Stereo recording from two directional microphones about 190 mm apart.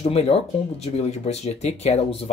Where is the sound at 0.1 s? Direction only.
35° left (ahead or behind).